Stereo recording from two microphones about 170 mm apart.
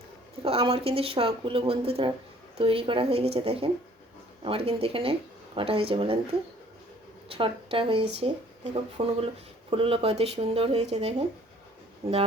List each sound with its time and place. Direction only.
0.4 s speech: 35° right (ahead or behind)
7.3 s speech: 30° right (ahead or behind)